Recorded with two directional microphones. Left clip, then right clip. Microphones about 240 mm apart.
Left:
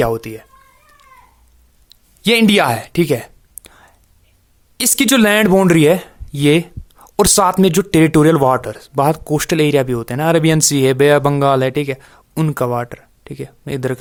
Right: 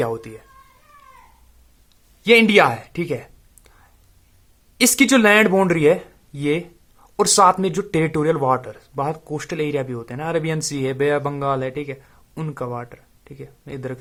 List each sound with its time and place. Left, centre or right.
0.0 s speech: left
2.2 s whispering: left
4.8 s speech: left